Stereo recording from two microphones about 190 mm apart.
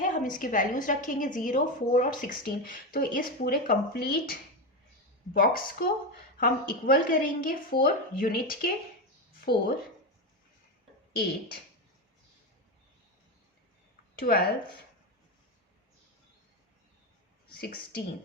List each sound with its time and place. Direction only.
0.0 s a woman's voice: 45° left (ahead or behind)
14.2 s speech: 50° left (ahead or behind)
17.5 s speech: 50° left (ahead or behind)